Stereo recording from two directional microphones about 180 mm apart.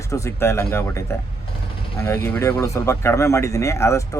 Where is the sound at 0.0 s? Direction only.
15° left (ahead or behind).